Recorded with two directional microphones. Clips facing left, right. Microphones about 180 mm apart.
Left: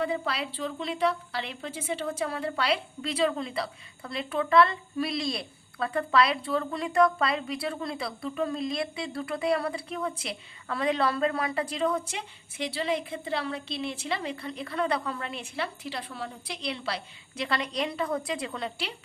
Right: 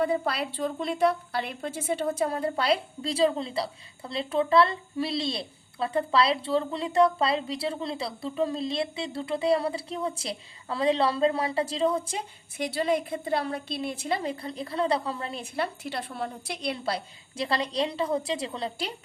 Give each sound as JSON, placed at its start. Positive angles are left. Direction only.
{"t": 0.0, "sound": "a woman's voice", "side_deg": -50}
{"t": 12.6, "sound": "a woman's voice", "side_deg": -45}
{"t": 17.3, "sound": "a woman's voice", "side_deg": -30}